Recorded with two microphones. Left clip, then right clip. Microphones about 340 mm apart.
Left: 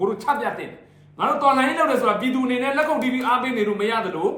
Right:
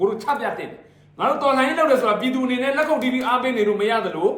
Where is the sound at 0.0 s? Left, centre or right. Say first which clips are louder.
Right 1 dB; centre.